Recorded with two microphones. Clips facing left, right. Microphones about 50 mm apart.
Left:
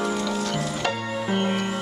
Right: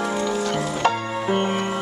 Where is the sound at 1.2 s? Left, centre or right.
Centre.